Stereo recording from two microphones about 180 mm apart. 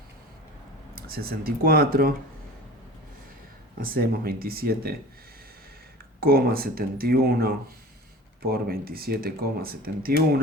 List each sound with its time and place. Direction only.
0.9 s speech: 55° right (ahead or behind)
3.8 s speech: 55° right (ahead or behind)
6.1 s speech: 55° right (ahead or behind)